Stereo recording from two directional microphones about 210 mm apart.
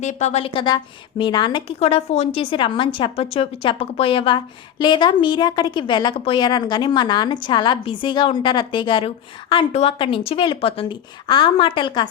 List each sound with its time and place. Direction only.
0.0 s a woman's voice: 35° left (ahead or behind)